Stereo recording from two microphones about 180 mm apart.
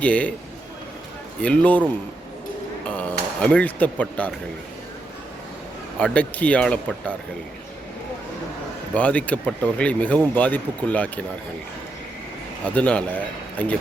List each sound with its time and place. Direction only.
0.0 s speech: 10° left (ahead or behind)
1.4 s speech: 5° left (ahead or behind)
2.8 s speech: 10° left (ahead or behind)
6.0 s speech: 5° left (ahead or behind)
9.0 s speech: 5° left (ahead or behind)
12.7 s speech: 5° left (ahead or behind)